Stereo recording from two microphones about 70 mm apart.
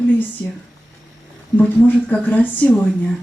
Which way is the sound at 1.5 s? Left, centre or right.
Left.